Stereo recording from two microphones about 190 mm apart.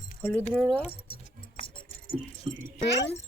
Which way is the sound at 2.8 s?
65° left (ahead or behind).